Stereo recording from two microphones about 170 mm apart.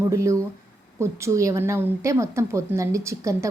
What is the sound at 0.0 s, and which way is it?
A woman's voice, 15° right (ahead or behind).